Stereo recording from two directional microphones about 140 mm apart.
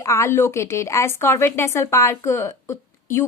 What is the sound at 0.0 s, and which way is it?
A woman's voice, 20° left (ahead or behind).